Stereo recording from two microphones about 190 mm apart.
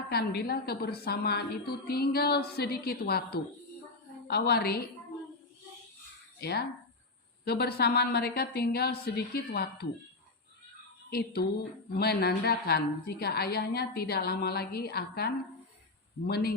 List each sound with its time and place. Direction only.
0.1 s a woman's voice: 55° left (ahead or behind)
6.4 s a woman's voice: 55° left (ahead or behind)
11.1 s a woman's voice: 55° left (ahead or behind)